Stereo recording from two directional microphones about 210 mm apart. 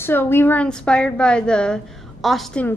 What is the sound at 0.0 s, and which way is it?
A woman's voice, 10° left (ahead or behind).